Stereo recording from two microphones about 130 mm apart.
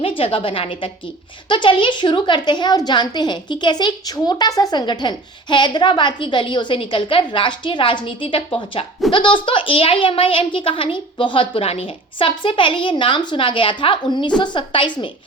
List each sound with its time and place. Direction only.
0.0 s a woman's voice: 45° left (ahead or behind)